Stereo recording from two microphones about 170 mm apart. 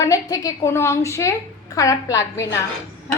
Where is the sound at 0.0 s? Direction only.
20° left (ahead or behind).